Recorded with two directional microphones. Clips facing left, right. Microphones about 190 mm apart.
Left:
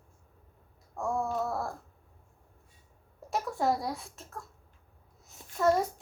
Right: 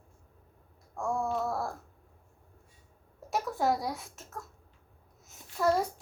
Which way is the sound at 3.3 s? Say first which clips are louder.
Even; centre (ahead or behind).